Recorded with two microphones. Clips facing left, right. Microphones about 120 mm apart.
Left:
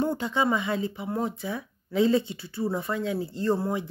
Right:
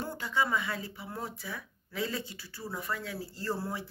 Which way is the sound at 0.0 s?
20° left (ahead or behind).